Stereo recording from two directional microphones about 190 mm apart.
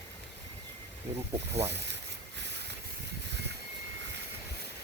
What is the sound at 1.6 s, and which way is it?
Boat, 60° right (ahead or behind).